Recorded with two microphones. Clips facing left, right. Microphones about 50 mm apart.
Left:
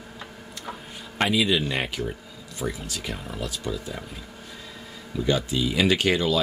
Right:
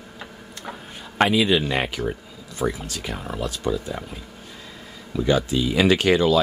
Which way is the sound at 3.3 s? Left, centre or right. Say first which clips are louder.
Right 7 dB; right.